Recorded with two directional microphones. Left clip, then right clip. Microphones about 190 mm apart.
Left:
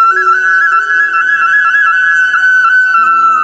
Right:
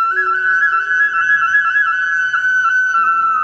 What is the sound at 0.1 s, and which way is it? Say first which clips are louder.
Flute: left 6 dB; 40° left (ahead or behind).